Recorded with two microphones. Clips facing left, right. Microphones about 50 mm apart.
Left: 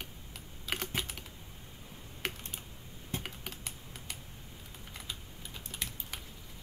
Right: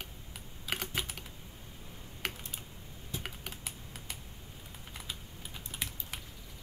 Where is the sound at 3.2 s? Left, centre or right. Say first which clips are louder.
Right 1 dB; centre.